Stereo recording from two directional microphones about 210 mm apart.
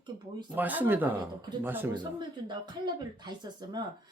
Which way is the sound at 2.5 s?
20° right (ahead or behind).